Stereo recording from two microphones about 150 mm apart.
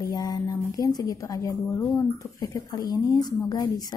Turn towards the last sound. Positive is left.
turn(degrees=30)  # may be behind; listen again after turning